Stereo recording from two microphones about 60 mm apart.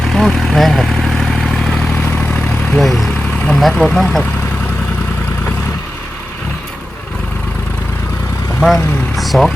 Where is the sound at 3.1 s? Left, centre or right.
Left.